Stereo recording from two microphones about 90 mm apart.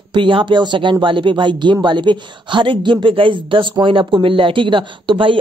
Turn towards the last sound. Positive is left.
turn(degrees=-65)  # may be behind; listen again after turning